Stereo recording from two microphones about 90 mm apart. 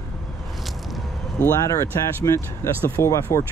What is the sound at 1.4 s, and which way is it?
Speech, 35° left (ahead or behind).